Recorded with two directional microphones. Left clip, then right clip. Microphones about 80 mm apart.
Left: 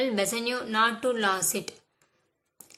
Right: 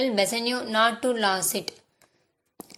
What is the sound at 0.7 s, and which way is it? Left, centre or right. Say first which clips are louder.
Speech: right 2 dB; right.